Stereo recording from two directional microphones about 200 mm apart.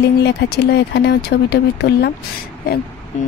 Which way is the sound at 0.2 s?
55° left (ahead or behind).